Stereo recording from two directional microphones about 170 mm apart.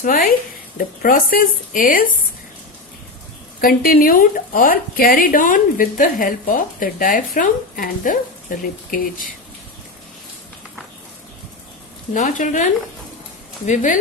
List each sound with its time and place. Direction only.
0.0 s a woman's voice: 55° left (ahead or behind)
3.6 s a woman's voice: 60° left (ahead or behind)
12.1 s a woman's voice: 50° left (ahead or behind)
13.7 s a woman's voice: 50° left (ahead or behind)